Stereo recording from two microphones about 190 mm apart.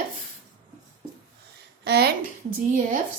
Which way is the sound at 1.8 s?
55° right (ahead or behind).